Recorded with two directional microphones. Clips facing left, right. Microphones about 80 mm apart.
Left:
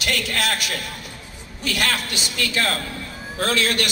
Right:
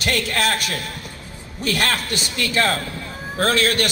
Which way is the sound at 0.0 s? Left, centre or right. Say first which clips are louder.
Right 3 dB; right.